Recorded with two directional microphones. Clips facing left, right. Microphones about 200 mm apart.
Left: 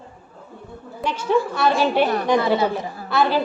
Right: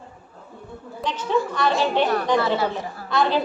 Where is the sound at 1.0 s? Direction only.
10° left (ahead or behind).